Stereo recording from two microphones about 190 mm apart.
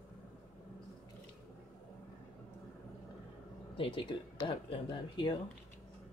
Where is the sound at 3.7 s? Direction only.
25° left (ahead or behind).